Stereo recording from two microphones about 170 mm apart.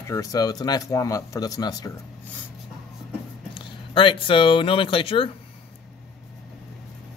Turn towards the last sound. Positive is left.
turn(degrees=30)  # may be behind; listen again after turning